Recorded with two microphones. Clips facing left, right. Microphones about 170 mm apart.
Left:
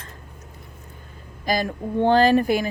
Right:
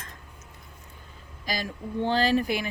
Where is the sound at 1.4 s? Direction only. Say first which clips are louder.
Left 9 dB; 55° left (ahead or behind).